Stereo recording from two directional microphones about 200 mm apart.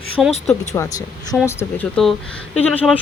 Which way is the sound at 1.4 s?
5° left (ahead or behind).